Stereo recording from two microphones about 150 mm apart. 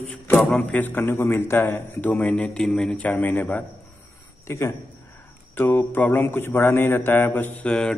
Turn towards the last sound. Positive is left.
turn(degrees=5)  # may be behind; listen again after turning